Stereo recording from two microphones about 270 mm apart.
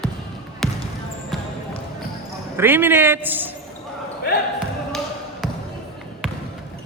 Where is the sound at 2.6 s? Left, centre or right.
Centre.